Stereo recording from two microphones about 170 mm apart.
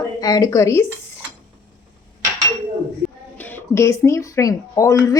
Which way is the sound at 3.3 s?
10° left (ahead or behind).